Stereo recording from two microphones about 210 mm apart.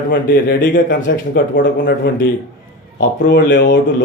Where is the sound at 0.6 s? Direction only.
40° left (ahead or behind).